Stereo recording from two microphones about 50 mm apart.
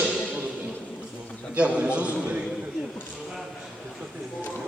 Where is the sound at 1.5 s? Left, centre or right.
Right.